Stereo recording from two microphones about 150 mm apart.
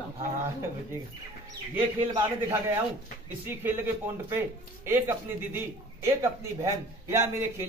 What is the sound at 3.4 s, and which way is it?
A man's voice, 15° right (ahead or behind).